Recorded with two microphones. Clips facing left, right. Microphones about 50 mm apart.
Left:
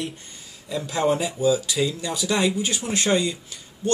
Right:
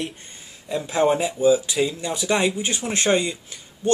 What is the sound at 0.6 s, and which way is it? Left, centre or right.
Speech, right.